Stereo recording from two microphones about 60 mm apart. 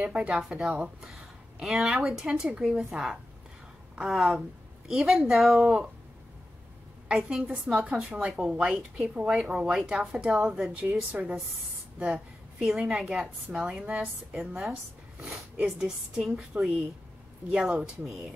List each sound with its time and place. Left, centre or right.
0.0 s a woman's voice: centre
1.6 s a woman's voice: centre
7.1 s a woman's voice: centre
7.6 s a woman's voice: centre
10.7 s a woman's voice: right
12.0 s a sound: right
12.6 s a woman's voice: centre
16.2 s a woman's voice: centre
17.5 s a woman's voice: centre